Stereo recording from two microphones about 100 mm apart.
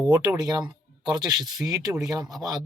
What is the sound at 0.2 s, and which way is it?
Speech, 40° right (ahead or behind).